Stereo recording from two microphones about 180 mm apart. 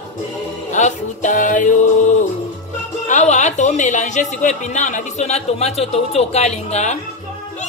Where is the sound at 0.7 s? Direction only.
45° left (ahead or behind).